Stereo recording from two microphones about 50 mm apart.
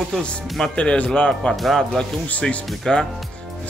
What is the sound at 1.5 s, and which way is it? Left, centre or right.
Speech, centre.